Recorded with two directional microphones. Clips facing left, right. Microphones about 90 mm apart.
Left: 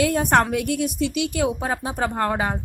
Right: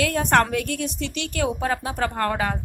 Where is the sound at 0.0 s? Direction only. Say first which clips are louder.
Left 1 dB; 15° left (ahead or behind).